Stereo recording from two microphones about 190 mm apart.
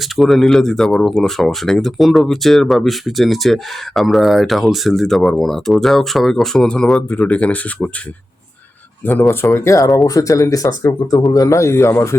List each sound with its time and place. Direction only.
0.0 s speech: centre (ahead or behind)
9.0 s speech: 10° left (ahead or behind)